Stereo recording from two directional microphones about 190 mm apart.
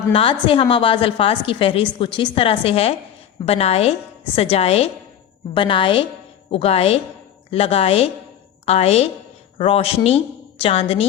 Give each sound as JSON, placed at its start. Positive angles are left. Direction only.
{"t": 0.1, "sound": "a woman's voice", "side_deg": 30}